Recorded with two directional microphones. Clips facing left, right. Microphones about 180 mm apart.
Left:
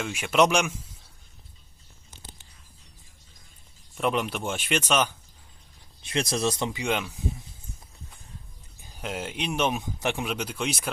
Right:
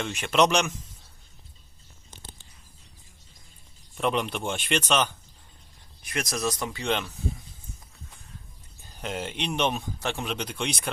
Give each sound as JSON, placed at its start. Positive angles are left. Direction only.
{"t": 0.0, "sound": "speech", "side_deg": 5}
{"t": 3.9, "sound": "speech", "side_deg": 5}
{"t": 6.0, "sound": "speech", "side_deg": 25}
{"t": 6.8, "sound": "speech", "side_deg": 10}
{"t": 8.8, "sound": "speech", "side_deg": 5}